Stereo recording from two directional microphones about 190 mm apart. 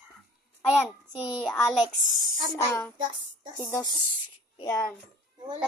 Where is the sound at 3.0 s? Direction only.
25° right (ahead or behind).